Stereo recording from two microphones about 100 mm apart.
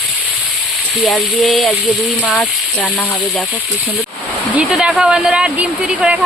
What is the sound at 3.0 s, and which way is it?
Speech, 15° left (ahead or behind).